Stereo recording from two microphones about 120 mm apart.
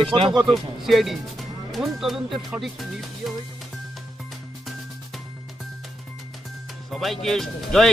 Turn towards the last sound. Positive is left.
turn(degrees=5)  # may be behind; listen again after turning